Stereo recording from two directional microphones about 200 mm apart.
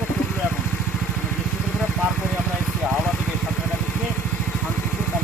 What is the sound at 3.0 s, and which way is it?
Vehicle, 5° left (ahead or behind).